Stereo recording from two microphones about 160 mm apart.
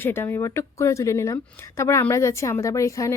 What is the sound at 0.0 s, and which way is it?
Speech, 15° left (ahead or behind).